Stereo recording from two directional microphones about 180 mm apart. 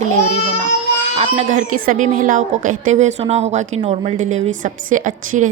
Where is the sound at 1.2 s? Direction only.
40° right (ahead or behind).